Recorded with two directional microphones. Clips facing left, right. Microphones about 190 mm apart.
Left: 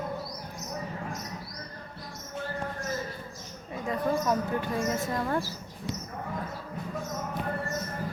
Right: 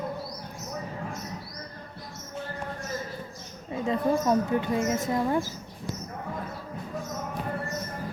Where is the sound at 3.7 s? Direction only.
25° right (ahead or behind).